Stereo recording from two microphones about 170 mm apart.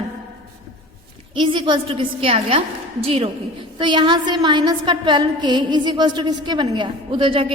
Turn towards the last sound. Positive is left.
turn(degrees=-30)  # may be behind; listen again after turning